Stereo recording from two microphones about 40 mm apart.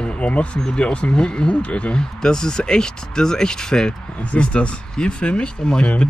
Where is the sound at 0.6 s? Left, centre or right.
Centre.